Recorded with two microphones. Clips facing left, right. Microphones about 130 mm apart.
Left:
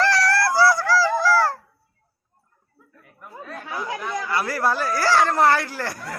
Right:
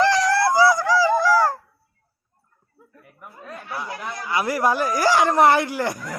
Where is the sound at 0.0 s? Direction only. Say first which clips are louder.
Right 2 dB; 20° right (ahead or behind).